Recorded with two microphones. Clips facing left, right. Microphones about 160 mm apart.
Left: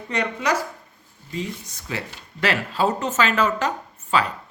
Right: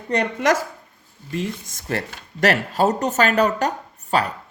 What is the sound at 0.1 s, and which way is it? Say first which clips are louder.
Speech: right 4 dB; 60° right (ahead or behind).